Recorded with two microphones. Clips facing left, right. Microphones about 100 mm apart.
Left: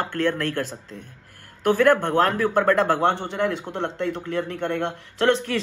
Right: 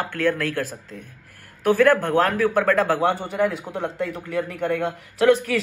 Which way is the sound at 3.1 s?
75° left (ahead or behind).